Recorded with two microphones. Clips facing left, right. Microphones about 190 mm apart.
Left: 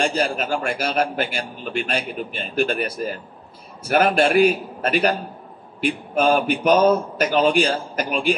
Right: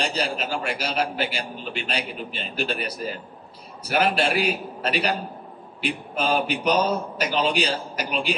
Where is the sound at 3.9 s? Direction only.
55° left (ahead or behind).